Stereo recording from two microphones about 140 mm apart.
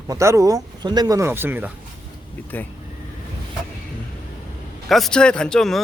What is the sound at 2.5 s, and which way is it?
Speech, 15° left (ahead or behind).